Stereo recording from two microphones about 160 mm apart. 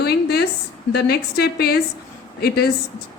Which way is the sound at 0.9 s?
85° left.